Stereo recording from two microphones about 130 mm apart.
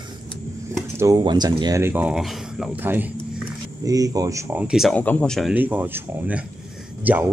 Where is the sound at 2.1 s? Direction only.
Centre (ahead or behind).